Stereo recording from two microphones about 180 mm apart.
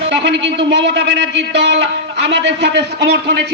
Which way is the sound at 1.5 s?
75° right (ahead or behind).